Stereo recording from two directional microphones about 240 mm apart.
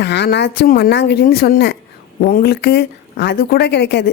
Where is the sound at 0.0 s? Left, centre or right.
Left.